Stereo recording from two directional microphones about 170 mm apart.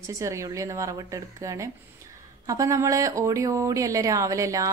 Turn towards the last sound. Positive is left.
turn(degrees=-20)  # may be behind; listen again after turning